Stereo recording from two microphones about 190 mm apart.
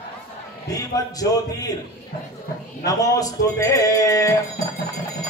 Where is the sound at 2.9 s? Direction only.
20° left (ahead or behind).